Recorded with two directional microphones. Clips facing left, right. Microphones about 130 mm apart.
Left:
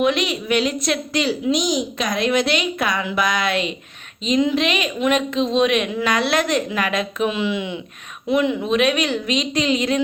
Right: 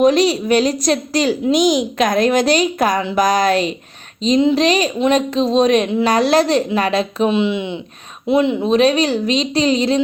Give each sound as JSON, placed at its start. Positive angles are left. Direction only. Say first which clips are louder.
{"t": 0.0, "sound": "a woman's voice", "louder": "right 7 dB", "side_deg": -35}